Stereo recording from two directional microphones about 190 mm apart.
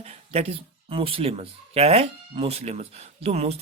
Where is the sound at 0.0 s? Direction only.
35° right (ahead or behind).